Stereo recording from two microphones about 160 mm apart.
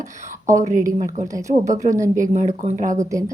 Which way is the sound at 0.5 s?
55° right (ahead or behind).